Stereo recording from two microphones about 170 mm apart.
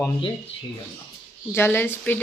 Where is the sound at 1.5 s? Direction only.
15° left (ahead or behind).